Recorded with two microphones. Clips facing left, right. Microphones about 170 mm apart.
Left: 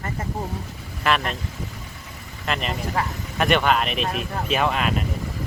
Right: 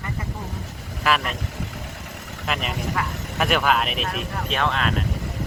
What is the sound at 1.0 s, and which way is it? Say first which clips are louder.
Speech: even; centre (ahead or behind).